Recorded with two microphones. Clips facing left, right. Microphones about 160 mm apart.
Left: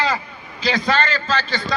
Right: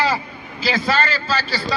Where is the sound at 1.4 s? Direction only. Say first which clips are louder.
Even; 35° right (ahead or behind).